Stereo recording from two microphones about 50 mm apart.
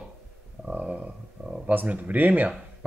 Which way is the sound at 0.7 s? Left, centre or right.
Right.